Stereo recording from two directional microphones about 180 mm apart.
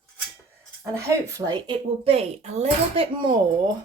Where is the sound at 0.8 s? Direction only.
15° right (ahead or behind).